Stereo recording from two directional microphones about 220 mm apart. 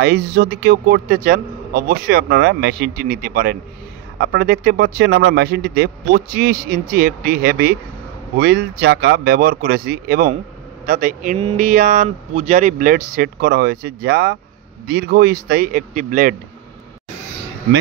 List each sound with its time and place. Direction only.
0.0 s a man's voice: 45° right (ahead or behind)